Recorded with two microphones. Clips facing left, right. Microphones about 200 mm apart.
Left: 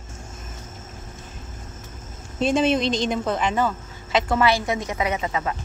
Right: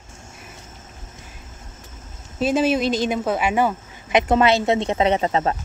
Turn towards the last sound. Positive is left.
turn(degrees=-35)  # may be behind; listen again after turning